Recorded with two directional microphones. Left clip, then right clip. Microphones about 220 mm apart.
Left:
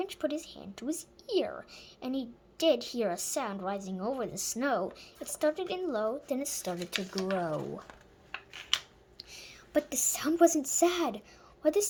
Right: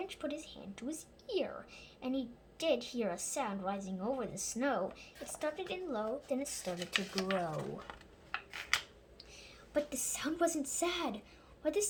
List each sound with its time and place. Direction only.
0.0 s a woman's voice: 35° left (ahead or behind)
6.7 s speech: 5° left (ahead or behind)
9.1 s a woman's voice: 45° left (ahead or behind)